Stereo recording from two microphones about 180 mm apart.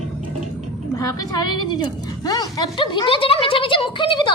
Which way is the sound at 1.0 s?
20° left (ahead or behind).